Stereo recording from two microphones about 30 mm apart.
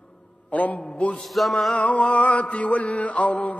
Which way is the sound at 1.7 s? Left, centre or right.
Left.